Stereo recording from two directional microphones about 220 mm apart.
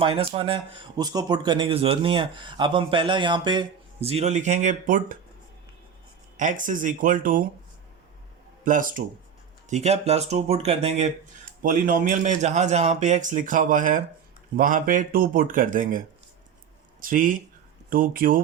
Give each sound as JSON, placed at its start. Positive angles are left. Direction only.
{"t": 0.0, "sound": "speech", "side_deg": -25}
{"t": 6.3, "sound": "a man's voice", "side_deg": -35}
{"t": 8.6, "sound": "a man's voice", "side_deg": -40}